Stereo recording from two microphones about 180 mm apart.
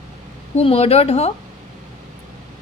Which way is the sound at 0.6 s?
35° left (ahead or behind).